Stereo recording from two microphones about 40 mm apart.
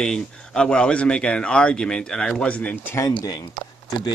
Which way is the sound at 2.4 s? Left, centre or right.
Left.